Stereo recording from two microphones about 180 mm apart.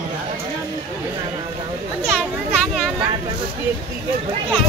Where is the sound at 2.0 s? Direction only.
Centre (ahead or behind).